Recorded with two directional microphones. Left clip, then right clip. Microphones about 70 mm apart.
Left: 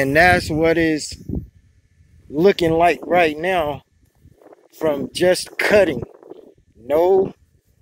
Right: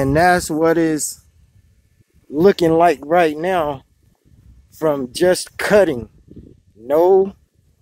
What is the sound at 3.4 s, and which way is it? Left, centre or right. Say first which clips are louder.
Speech: right 1 dB; right.